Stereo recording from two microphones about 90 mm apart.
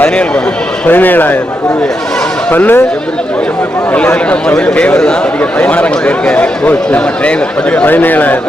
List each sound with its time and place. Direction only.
0.9 s speech: 20° left (ahead or behind)
2.5 s speech: 20° left (ahead or behind)
3.9 s a man's voice: 15° left (ahead or behind)